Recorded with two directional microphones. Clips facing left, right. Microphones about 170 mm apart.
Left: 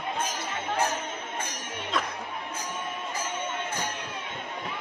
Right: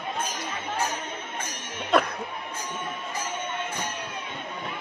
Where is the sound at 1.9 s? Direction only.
65° right (ahead or behind).